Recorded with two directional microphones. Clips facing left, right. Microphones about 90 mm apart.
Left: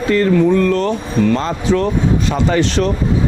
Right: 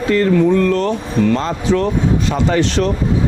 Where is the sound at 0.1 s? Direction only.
20° left (ahead or behind).